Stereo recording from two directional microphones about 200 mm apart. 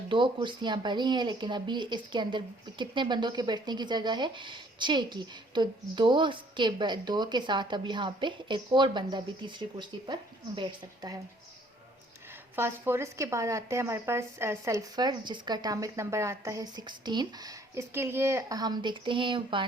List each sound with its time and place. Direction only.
0.1 s speech: 25° right (ahead or behind)
12.5 s speech: 10° right (ahead or behind)